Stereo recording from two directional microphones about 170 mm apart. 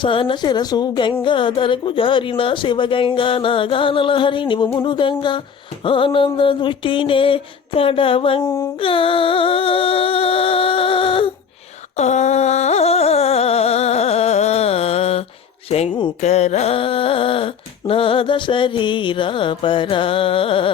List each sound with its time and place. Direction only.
0.0 s a woman's voice: 30° left (ahead or behind)
5.8 s music: 30° left (ahead or behind)
8.4 s music: 15° left (ahead or behind)
8.8 s music: 30° left (ahead or behind)
11.9 s music: 45° left (ahead or behind)
15.7 s a sound: 30° left (ahead or behind)